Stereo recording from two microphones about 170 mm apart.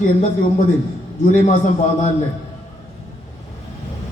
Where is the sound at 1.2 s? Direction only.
50° left (ahead or behind).